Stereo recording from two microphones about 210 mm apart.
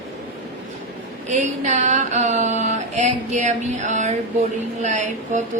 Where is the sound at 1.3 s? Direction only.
35° right (ahead or behind).